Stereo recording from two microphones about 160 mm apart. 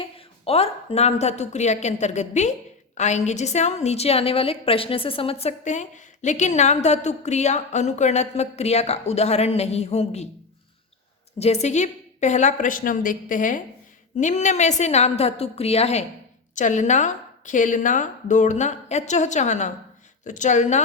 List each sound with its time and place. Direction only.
0.0 s a woman's voice: 35° left (ahead or behind)
11.3 s a woman's voice: 40° left (ahead or behind)